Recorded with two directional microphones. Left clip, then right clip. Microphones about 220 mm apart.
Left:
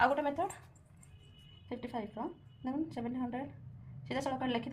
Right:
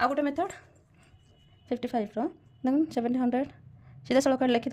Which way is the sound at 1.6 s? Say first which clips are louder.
Right 10 dB; 55° right (ahead or behind).